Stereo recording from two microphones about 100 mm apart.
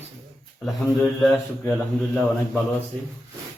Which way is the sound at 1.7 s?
Centre (ahead or behind).